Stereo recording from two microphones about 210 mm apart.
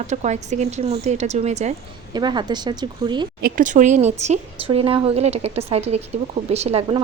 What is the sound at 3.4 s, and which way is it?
Speech, 45° right (ahead or behind).